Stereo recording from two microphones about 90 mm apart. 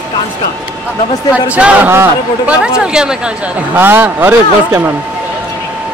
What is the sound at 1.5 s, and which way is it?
Speech, 15° right (ahead or behind).